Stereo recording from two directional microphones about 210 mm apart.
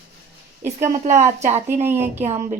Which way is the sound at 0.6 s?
35° right (ahead or behind).